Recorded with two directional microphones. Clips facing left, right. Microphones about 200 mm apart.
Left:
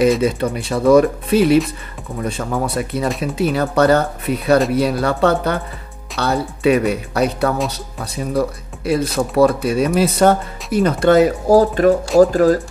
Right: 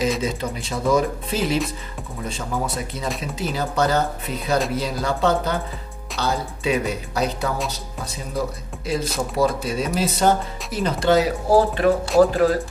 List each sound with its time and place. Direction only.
0.2 s speech: 65° left (ahead or behind)
11.5 s speech: 40° left (ahead or behind)